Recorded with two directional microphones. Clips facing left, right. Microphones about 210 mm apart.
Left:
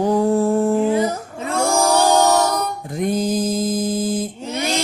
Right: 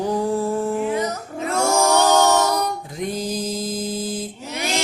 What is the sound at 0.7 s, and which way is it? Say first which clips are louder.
Music: left 5 dB; 30° left (ahead or behind).